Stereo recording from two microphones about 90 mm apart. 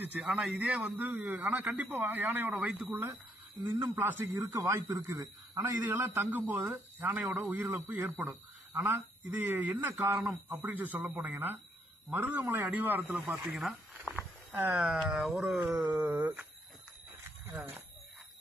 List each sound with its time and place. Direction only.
0.0 s speech: 10° right (ahead or behind)
13.6 s a sound: 10° right (ahead or behind)
14.6 s speech: 10° right (ahead or behind)
15.4 s speech: 20° right (ahead or behind)
17.5 s speech: 25° right (ahead or behind)